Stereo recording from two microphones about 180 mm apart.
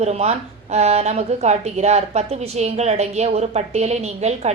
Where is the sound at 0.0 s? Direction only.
35° right (ahead or behind).